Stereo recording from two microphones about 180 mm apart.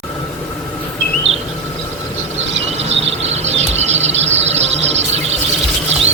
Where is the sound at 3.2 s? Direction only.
35° right (ahead or behind).